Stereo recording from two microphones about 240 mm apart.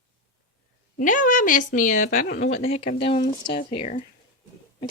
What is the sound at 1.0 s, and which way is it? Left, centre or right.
Speech, left.